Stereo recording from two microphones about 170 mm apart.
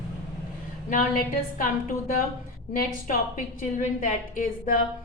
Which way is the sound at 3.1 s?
55° left (ahead or behind).